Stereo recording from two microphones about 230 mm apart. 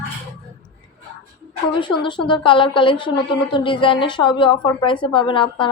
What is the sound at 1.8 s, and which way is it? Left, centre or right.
A woman's voice, left.